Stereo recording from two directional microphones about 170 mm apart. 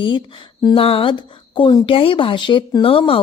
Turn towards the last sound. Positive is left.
turn(degrees=30)  # may be behind; listen again after turning